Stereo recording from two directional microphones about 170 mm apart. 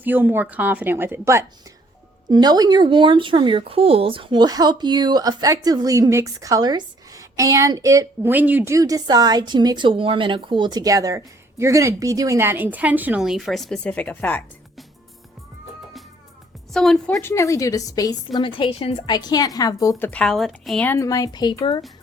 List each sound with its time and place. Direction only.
0.0 s a woman's voice: 10° right (ahead or behind); by 14.8 s 10° left (ahead or behind)
16.7 s a woman's voice: centre (ahead or behind)
17.2 s a woman's voice: 15° left (ahead or behind)
20.1 s a woman's voice: 5° left (ahead or behind)
20.9 s a woman's voice: 20° left (ahead or behind)